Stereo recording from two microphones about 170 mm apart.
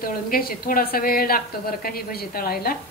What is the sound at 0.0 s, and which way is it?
A woman's voice, 60° left (ahead or behind).